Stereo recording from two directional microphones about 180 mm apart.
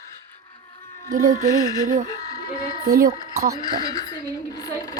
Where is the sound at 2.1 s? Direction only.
20° left (ahead or behind).